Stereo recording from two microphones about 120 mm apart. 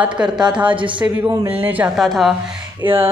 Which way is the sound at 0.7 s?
45° right (ahead or behind).